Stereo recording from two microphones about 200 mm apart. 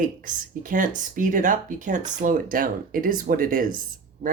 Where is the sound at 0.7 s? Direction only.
40° right (ahead or behind).